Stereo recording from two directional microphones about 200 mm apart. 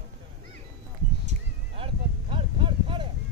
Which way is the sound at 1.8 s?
25° right (ahead or behind).